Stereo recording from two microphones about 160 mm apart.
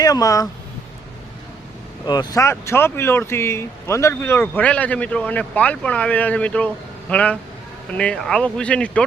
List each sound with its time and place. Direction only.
0.0 s speech: 20° left (ahead or behind)
2.0 s speech: 25° left (ahead or behind); by 9.0 s 5° left (ahead or behind)